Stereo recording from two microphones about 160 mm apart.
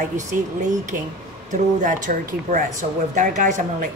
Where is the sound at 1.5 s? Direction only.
55° right (ahead or behind).